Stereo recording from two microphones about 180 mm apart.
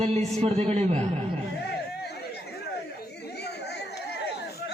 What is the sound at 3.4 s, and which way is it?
Chatter, 65° left (ahead or behind).